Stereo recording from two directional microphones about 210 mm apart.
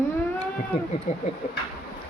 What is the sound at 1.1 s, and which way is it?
Speech, 35° left (ahead or behind).